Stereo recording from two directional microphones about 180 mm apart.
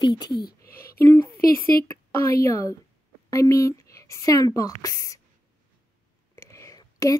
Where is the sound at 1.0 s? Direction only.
15° left (ahead or behind).